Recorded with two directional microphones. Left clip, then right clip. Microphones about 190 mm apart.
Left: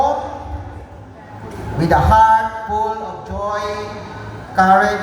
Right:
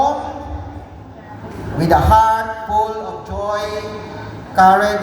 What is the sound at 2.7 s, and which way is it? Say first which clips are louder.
Music: right 3 dB; 50° right (ahead or behind).